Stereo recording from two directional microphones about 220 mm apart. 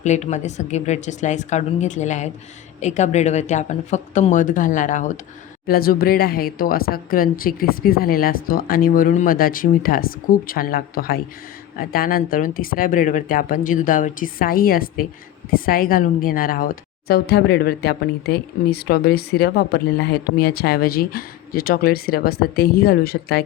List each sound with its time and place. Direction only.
0.0 s a woman's voice: 30° left (ahead or behind)